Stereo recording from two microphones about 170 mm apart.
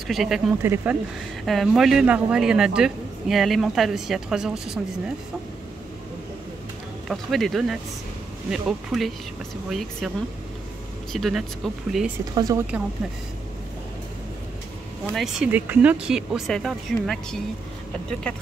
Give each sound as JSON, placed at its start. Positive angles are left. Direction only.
{"t": 0.1, "sound": "speech", "side_deg": 0}
{"t": 0.6, "sound": "speech", "side_deg": -15}
{"t": 1.4, "sound": "speech", "side_deg": 0}
{"t": 7.1, "sound": "speech", "side_deg": 0}
{"t": 11.1, "sound": "speech", "side_deg": 0}
{"t": 12.4, "sound": "a woman's voice", "side_deg": -20}
{"t": 15.1, "sound": "speech", "side_deg": -5}